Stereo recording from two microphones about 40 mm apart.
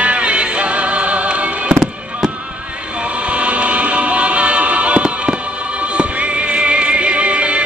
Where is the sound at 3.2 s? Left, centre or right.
Right.